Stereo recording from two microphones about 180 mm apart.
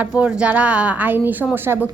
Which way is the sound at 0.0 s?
5° right (ahead or behind).